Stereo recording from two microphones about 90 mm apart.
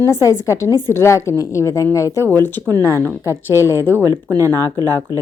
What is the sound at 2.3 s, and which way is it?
Speech, 20° left (ahead or behind).